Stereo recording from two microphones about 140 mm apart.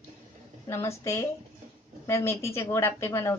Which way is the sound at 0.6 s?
20° left (ahead or behind).